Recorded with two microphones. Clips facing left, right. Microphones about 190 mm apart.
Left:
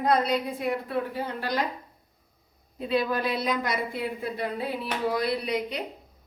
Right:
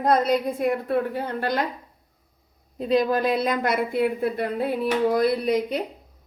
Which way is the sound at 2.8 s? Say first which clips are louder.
Right 5 dB; 40° right (ahead or behind).